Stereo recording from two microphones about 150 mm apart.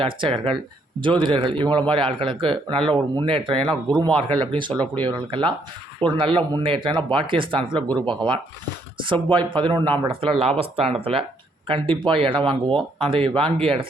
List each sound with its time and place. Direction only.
0.0 s speech: 35° right (ahead or behind)
4.7 s speech: 10° left (ahead or behind)
5.0 s speech: 35° right (ahead or behind)